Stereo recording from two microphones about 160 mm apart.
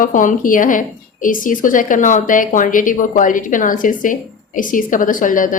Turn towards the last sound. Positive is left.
turn(degrees=55)  # may be behind; listen again after turning